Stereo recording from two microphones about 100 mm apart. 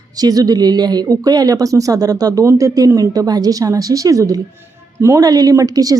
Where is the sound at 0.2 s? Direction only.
40° right (ahead or behind).